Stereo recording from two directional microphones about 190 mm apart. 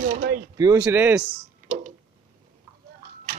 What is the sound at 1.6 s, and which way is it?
Tick-tock, 40° right (ahead or behind).